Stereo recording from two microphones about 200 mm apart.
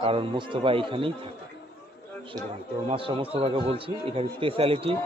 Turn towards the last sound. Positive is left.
turn(degrees=-30)  # may be behind; listen again after turning